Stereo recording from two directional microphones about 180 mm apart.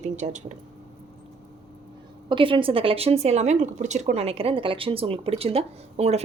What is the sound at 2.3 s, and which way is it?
Speech, 30° right (ahead or behind).